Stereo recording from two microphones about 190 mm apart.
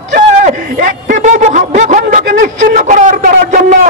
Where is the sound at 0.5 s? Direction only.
40° right (ahead or behind).